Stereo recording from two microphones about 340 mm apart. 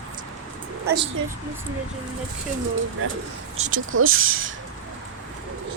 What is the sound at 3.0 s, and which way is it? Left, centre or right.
Speech, right.